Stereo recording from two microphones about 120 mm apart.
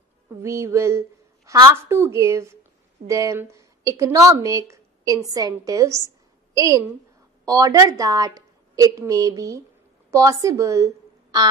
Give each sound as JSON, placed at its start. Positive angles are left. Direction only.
{"t": 0.4, "sound": "a woman's voice", "side_deg": -25}